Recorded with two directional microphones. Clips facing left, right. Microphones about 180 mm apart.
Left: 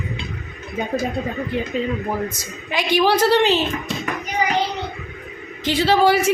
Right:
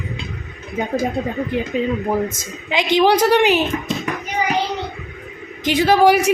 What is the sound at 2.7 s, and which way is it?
Speech, 20° right (ahead or behind).